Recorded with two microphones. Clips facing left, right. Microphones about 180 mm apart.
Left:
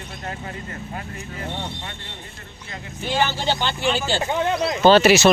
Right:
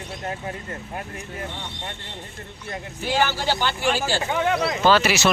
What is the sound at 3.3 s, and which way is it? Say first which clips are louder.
Speech: even; 20° left (ahead or behind).